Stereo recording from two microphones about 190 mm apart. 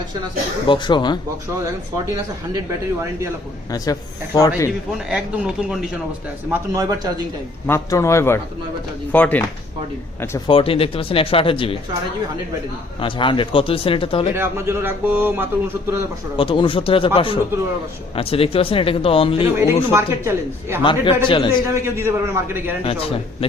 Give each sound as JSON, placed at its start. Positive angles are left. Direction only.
{"t": 0.7, "sound": "speech", "side_deg": 25}
{"t": 2.1, "sound": "a man's voice", "side_deg": -20}
{"t": 4.4, "sound": "speech", "side_deg": 20}
{"t": 5.0, "sound": "speech", "side_deg": -5}
{"t": 6.5, "sound": "speech", "side_deg": -20}
{"t": 7.7, "sound": "a man's voice", "side_deg": 15}
{"t": 10.5, "sound": "speech", "side_deg": 30}
{"t": 13.0, "sound": "speech", "side_deg": 25}
{"t": 14.3, "sound": "a man's voice", "side_deg": -10}
{"t": 16.4, "sound": "speech", "side_deg": 25}
{"t": 19.5, "sound": "a man's voice", "side_deg": -15}
{"t": 20.8, "sound": "speech", "side_deg": 25}
{"t": 21.8, "sound": "a man's voice", "side_deg": -15}
{"t": 22.8, "sound": "speech", "side_deg": 30}